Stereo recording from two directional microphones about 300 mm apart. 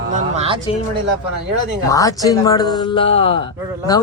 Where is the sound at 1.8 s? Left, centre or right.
Centre.